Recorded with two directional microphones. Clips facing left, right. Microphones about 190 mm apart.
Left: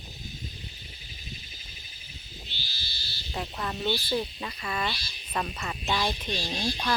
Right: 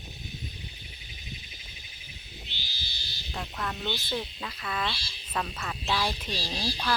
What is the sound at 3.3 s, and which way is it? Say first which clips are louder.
Speech: left 2 dB; 15° left (ahead or behind).